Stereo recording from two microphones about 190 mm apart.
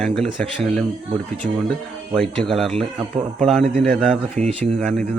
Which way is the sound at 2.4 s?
Centre (ahead or behind).